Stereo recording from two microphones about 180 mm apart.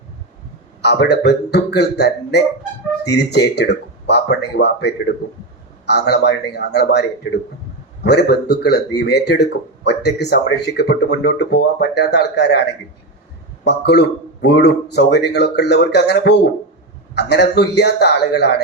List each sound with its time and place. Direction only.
0.8 s speech: 70° left (ahead or behind)
8.0 s speech: 70° left (ahead or behind)